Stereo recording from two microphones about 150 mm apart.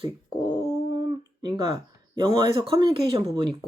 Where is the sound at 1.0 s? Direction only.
30° right (ahead or behind).